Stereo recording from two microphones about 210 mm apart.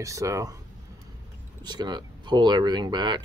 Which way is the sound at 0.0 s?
15° right (ahead or behind).